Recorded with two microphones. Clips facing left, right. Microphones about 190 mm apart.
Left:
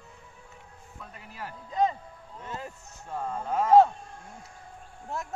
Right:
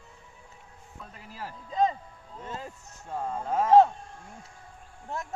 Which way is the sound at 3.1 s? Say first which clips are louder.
Right 1 dB; 15° right (ahead or behind).